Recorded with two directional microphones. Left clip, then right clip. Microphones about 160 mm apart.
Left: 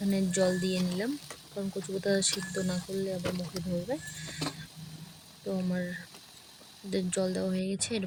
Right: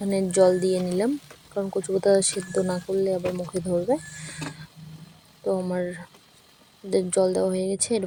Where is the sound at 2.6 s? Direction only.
Centre (ahead or behind).